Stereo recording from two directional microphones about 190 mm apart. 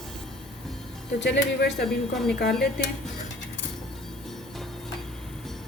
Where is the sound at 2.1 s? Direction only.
Centre (ahead or behind).